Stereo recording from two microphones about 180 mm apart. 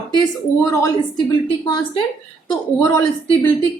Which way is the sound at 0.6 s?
15° left (ahead or behind).